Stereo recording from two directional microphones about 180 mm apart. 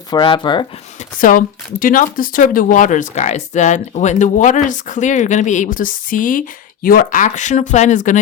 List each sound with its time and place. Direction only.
0.1 s speech: 25° left (ahead or behind)
0.9 s speech: 50° left (ahead or behind)